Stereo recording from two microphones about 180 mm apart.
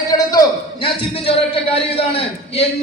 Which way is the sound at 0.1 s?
20° left (ahead or behind).